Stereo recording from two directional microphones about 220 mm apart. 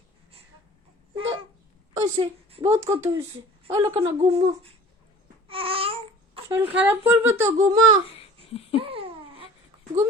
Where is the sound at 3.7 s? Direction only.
20° right (ahead or behind).